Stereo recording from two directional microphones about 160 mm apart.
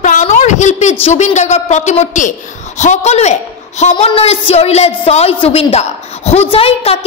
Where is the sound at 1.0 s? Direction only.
45° left (ahead or behind).